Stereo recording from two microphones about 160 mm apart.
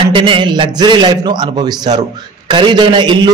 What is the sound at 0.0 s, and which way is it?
A man's voice, 30° right (ahead or behind).